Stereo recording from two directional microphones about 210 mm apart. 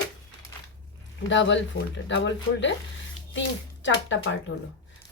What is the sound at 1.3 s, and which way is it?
Speech, 60° left (ahead or behind).